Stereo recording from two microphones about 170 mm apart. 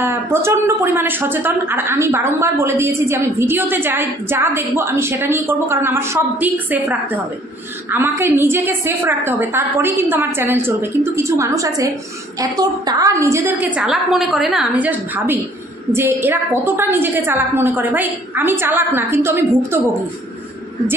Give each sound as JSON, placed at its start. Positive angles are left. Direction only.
{"t": 0.0, "sound": "a woman's voice", "side_deg": -15}